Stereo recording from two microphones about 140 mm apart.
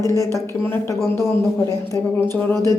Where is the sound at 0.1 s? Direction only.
25° left (ahead or behind).